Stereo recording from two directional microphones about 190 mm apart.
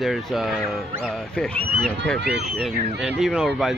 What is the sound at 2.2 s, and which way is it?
Speech, 60° right (ahead or behind).